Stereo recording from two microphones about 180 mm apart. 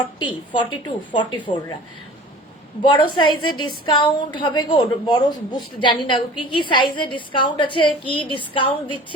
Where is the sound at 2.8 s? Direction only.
25° left (ahead or behind).